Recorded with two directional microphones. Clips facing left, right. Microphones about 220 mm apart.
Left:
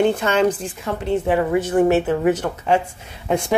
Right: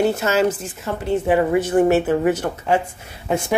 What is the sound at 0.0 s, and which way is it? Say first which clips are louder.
A woman's voice: left 1 dB; 5° right (ahead or behind).